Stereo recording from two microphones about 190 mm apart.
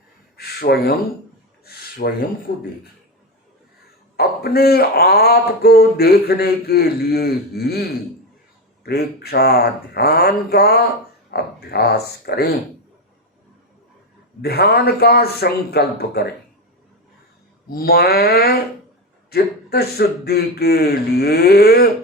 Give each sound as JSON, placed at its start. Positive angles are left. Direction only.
{"t": 0.3, "sound": "gasp", "side_deg": 55}
{"t": 1.6, "sound": "a sound", "side_deg": 55}
{"t": 2.5, "sound": "speech", "side_deg": 65}
{"t": 4.2, "sound": "speech", "side_deg": 55}
{"t": 14.4, "sound": "speech", "side_deg": 55}
{"t": 17.7, "sound": "speech", "side_deg": 50}